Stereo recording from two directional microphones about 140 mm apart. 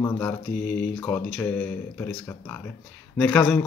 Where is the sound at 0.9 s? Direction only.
10° left (ahead or behind).